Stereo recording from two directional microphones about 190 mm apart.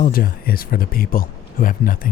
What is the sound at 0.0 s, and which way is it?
Speech, 50° left (ahead or behind).